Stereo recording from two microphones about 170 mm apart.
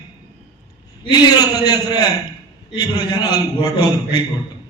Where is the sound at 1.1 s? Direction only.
25° left (ahead or behind).